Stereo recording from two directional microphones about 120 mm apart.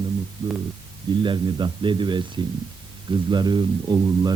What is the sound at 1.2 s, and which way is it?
Speech, 40° right (ahead or behind).